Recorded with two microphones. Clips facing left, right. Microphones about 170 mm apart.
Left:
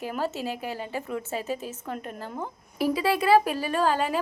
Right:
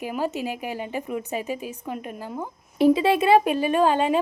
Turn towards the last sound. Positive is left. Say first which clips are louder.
# right 5 dB
turn(degrees=-20)  # may be behind; listen again after turning